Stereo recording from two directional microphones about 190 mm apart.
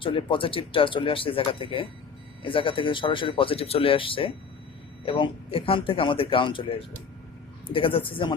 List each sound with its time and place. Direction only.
0.0 s speech: 25° left (ahead or behind)